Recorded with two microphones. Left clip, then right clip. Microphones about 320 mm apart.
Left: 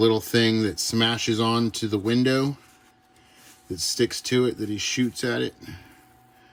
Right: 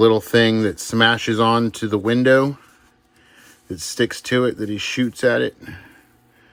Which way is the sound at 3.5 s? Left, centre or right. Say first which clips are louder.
Right 2 dB; centre.